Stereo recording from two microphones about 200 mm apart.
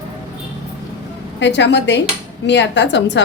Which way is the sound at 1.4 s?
60° left (ahead or behind).